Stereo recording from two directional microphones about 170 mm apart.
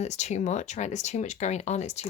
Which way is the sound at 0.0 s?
40° left (ahead or behind).